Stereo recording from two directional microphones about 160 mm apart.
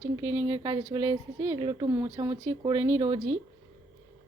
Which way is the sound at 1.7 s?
25° right (ahead or behind).